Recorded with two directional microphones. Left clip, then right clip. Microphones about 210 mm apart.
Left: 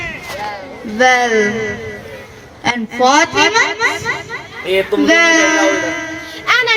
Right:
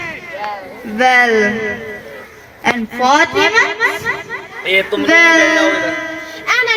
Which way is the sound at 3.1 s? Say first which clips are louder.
Right 2 dB; 30° right (ahead or behind).